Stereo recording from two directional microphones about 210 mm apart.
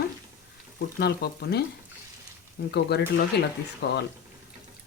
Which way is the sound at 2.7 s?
50° left (ahead or behind).